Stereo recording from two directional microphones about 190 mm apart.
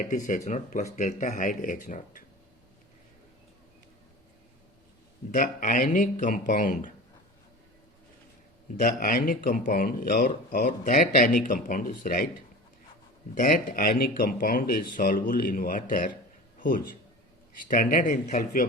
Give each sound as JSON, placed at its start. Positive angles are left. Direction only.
{"t": 0.1, "sound": "speech", "side_deg": 40}
{"t": 5.3, "sound": "speech", "side_deg": 45}
{"t": 8.7, "sound": "speech", "side_deg": 45}
{"t": 13.3, "sound": "a man's voice", "side_deg": 45}